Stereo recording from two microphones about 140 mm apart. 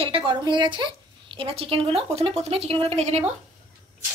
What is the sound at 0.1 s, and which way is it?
Speech, 35° right (ahead or behind).